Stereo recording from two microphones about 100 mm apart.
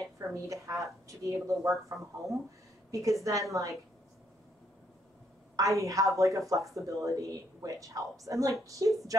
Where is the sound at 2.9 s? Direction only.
35° right (ahead or behind).